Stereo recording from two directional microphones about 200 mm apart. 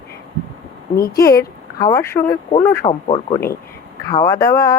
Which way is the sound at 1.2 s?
15° left (ahead or behind).